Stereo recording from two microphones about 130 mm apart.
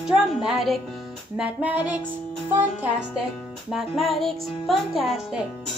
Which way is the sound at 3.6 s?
5° right (ahead or behind).